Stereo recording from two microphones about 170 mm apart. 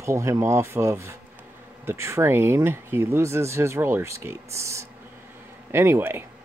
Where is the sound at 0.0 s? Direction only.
15° right (ahead or behind).